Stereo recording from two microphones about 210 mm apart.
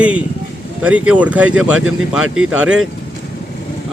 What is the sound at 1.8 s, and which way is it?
Speech, 80° right.